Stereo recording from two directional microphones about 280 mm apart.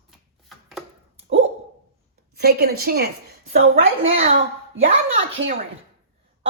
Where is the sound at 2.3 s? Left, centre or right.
Right.